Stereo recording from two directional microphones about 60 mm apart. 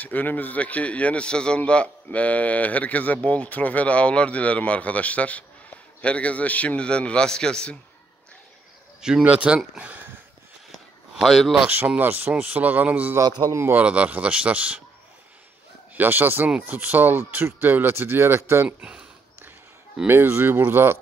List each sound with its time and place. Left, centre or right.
0.0 s a man's voice: left; by 7.7 s centre
9.2 s speech: right
9.8 s a sound: right
11.1 s speech: centre
12.0 s speech: right
15.9 s speech: right
18.8 s speech: centre
20.1 s speech: right